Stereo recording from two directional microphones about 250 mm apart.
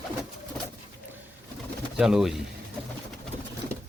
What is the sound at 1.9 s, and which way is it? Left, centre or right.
Speech, centre.